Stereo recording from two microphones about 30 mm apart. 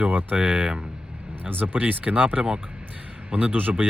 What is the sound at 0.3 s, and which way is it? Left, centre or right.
Speech, right.